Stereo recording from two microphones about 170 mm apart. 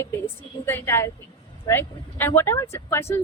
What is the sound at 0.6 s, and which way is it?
Speech, 10° left (ahead or behind).